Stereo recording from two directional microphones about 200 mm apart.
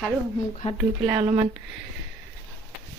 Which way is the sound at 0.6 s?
35° left (ahead or behind).